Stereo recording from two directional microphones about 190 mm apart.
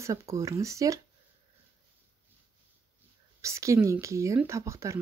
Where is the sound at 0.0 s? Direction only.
15° right (ahead or behind).